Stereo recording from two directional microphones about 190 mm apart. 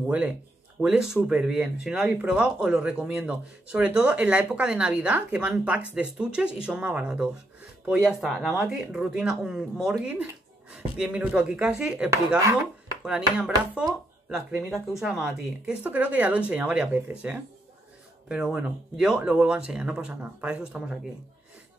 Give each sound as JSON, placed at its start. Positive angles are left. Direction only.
{"t": 0.7, "sound": "speech", "side_deg": -5}
{"t": 12.5, "sound": "speech", "side_deg": -5}